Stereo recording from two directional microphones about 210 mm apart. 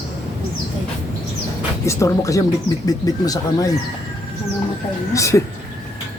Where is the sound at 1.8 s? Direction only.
15° left (ahead or behind).